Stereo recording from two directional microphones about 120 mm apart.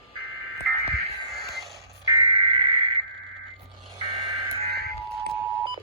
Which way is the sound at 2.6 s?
45° right (ahead or behind).